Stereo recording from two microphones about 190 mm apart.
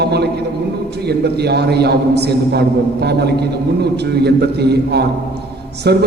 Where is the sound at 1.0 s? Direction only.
60° right (ahead or behind).